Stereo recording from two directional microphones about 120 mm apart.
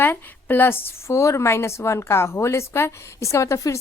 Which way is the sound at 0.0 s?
15° left (ahead or behind).